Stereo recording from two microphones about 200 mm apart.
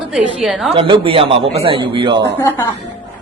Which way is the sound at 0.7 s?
25° right (ahead or behind).